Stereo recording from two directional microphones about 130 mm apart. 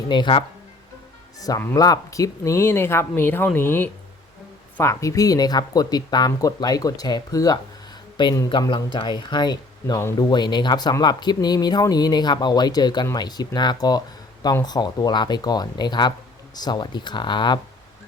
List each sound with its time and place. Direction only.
0.1 s speech: 35° left (ahead or behind)
1.4 s speech: 25° left (ahead or behind)